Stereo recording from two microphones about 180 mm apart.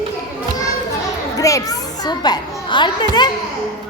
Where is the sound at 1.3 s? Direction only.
20° left (ahead or behind).